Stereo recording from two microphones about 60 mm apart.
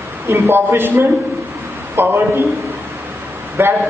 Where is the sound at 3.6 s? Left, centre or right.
Right.